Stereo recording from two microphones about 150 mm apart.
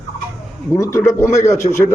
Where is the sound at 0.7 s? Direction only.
20° left (ahead or behind).